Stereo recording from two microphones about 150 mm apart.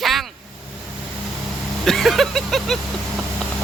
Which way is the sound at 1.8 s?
Centre (ahead or behind).